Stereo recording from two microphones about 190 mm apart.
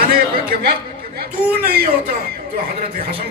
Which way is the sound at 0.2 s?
50° right (ahead or behind).